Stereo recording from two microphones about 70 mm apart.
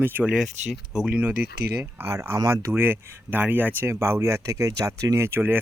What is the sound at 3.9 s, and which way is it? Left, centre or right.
Speech, right.